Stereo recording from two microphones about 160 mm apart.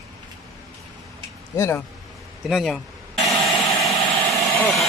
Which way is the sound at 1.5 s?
15° left (ahead or behind).